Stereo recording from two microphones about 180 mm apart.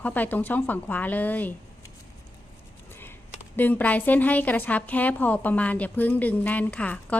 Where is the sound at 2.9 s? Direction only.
10° left (ahead or behind).